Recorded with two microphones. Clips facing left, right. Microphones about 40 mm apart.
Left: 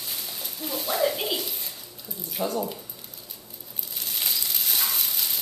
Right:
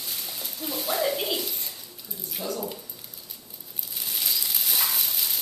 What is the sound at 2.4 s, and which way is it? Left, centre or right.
Speech, left.